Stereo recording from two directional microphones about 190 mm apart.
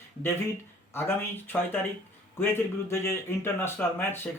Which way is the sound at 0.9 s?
10° left (ahead or behind).